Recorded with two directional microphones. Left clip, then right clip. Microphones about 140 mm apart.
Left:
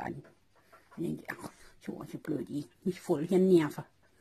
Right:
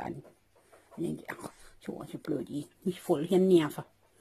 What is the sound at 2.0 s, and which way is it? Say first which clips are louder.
Speech: right 2 dB; 35° right (ahead or behind).